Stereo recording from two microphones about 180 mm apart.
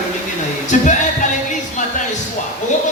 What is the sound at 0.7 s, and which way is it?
Music, 45° left (ahead or behind).